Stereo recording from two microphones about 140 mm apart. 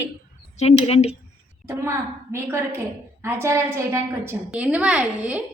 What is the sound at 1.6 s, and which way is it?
A woman's voice, 20° right (ahead or behind).